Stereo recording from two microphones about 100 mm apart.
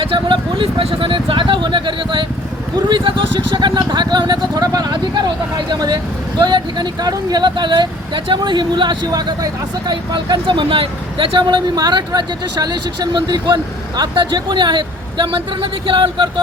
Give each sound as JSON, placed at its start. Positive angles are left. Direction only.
{"t": 0.0, "sound": "speech", "side_deg": -60}